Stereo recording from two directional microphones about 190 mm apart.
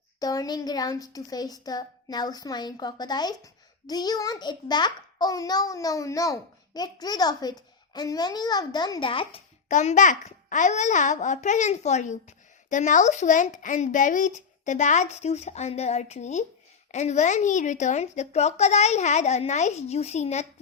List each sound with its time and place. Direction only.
0.2 s a woman's voice: 20° left (ahead or behind)
9.6 s speech: 40° left (ahead or behind)